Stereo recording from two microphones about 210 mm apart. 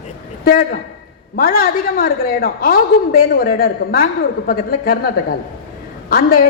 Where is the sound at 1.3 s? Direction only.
45° left (ahead or behind).